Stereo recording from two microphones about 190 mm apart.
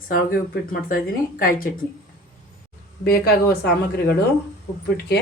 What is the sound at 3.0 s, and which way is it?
Speech, 55° left (ahead or behind).